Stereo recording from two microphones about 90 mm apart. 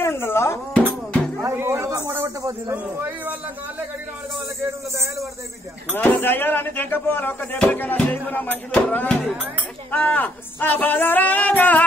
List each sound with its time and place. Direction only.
0.0 s music: 30° left (ahead or behind)
0.7 s music: 15° left (ahead or behind)
1.4 s a sound: 30° right (ahead or behind)
2.7 s speech: 20° right (ahead or behind)
5.9 s speech: 20° left (ahead or behind)